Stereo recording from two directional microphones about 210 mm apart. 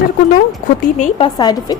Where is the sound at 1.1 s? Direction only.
20° left (ahead or behind).